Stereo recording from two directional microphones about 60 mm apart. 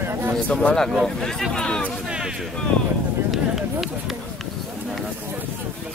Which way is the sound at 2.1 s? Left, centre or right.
Centre.